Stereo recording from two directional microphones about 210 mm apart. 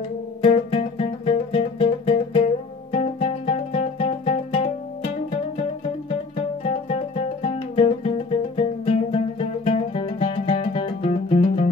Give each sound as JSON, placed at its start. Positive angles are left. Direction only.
{"t": 0.4, "sound": "music", "side_deg": 25}
{"t": 7.4, "sound": "music", "side_deg": 30}